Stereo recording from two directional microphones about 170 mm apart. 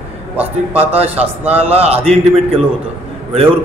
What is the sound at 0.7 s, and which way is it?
A man's voice, 35° right (ahead or behind).